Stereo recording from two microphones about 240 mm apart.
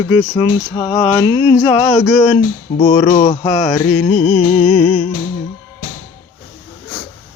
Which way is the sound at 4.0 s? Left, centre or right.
Left.